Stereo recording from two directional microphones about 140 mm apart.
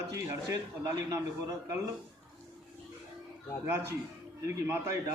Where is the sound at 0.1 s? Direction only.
25° right (ahead or behind).